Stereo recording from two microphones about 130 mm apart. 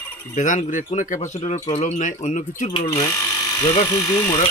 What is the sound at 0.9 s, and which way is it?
Speech, 70° left (ahead or behind).